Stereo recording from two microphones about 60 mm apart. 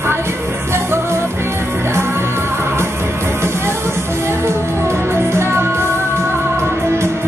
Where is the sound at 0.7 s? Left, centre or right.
Right.